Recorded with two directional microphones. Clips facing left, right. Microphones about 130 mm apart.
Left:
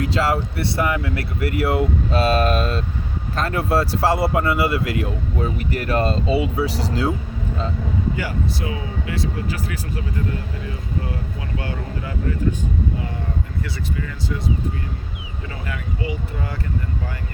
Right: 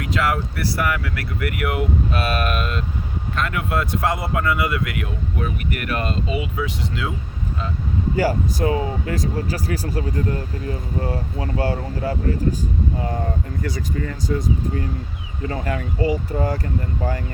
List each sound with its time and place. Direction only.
0.0 s speech: 30° left (ahead or behind)
8.1 s speech: 40° right (ahead or behind)
15.4 s speech: 40° right (ahead or behind)